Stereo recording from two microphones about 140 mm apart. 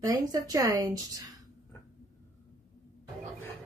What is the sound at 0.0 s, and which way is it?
A woman's voice, 25° right (ahead or behind).